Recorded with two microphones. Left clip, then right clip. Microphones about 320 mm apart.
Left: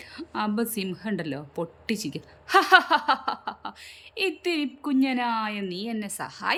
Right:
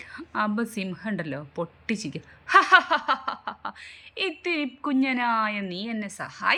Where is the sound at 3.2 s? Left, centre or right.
Centre.